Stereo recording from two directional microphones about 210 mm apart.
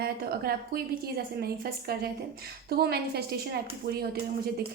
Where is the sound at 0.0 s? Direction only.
45° right (ahead or behind).